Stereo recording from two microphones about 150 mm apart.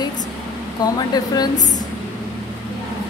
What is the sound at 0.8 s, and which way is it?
Speech, 25° left (ahead or behind).